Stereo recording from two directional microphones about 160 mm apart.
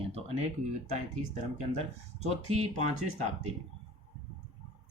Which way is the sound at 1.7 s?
45° right (ahead or behind).